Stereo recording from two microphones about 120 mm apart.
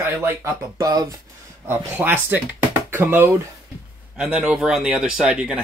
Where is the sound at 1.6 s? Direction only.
15° right (ahead or behind).